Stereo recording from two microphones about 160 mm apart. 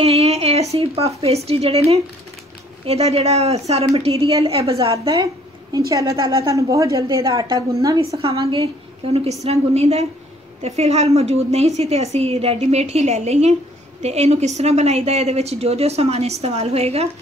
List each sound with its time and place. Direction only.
0.0 s a woman's voice: 40° right (ahead or behind)
2.8 s a woman's voice: 40° right (ahead or behind)
4.9 s a woman's voice: 25° right (ahead or behind)
8.2 s a woman's voice: 35° right (ahead or behind)